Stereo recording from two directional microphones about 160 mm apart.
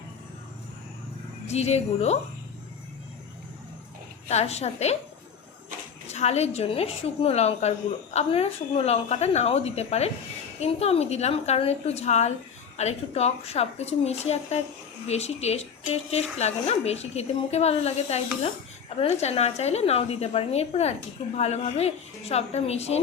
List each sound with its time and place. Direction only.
1.5 s a woman's voice: 40° left (ahead or behind)
4.3 s a woman's voice: 45° left (ahead or behind)
6.1 s speech: 40° left (ahead or behind)